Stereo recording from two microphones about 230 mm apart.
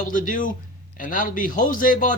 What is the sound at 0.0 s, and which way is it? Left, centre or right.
Speech, left.